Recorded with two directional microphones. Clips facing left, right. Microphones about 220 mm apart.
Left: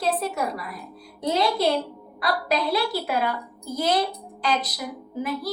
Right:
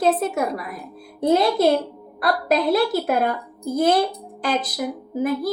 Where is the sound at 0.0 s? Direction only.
50° right (ahead or behind).